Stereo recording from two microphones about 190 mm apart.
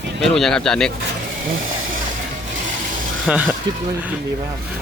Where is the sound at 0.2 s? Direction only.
Centre (ahead or behind).